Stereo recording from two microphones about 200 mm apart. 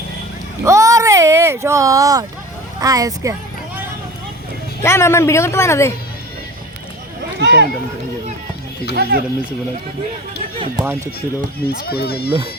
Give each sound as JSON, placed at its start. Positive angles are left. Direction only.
{"t": 0.6, "sound": "vehicle", "side_deg": -15}
{"t": 2.8, "sound": "speech", "side_deg": -15}
{"t": 4.8, "sound": "speech", "side_deg": 15}
{"t": 7.3, "sound": "speech", "side_deg": -60}
{"t": 9.0, "sound": "speech", "side_deg": -50}
{"t": 11.6, "sound": "speech", "side_deg": 50}